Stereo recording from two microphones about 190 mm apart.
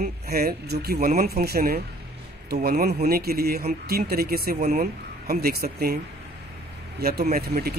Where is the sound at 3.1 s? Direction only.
55° right (ahead or behind).